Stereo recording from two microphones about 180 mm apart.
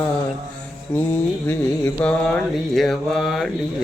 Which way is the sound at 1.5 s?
10° left (ahead or behind).